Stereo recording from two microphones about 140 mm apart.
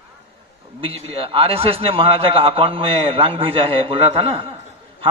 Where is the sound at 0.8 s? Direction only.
45° right (ahead or behind).